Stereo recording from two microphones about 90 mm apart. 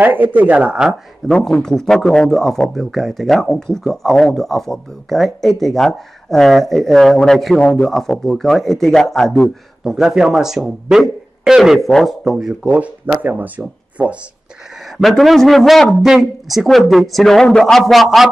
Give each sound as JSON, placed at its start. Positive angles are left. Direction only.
{"t": 0.0, "sound": "speech", "side_deg": -20}
{"t": 1.2, "sound": "speech", "side_deg": 5}
{"t": 15.0, "sound": "speech", "side_deg": 0}